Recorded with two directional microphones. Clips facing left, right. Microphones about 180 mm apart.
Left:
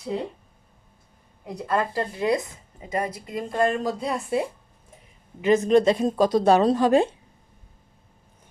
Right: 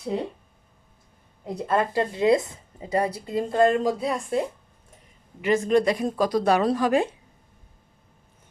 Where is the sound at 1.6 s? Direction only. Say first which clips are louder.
Right 2 dB; 25° right (ahead or behind).